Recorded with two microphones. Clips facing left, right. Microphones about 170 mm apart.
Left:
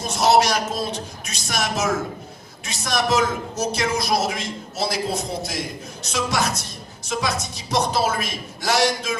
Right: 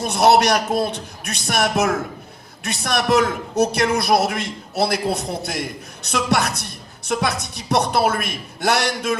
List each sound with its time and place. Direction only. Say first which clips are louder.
0.0 s a man's voice: right 2 dB; 60° right (ahead or behind)